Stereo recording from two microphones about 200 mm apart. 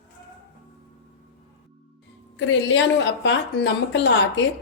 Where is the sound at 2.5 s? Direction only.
65° left (ahead or behind).